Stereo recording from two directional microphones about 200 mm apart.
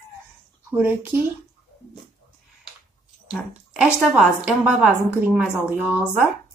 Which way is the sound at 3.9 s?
Centre (ahead or behind).